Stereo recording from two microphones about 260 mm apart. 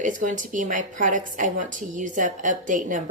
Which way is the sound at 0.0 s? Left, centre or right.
Right.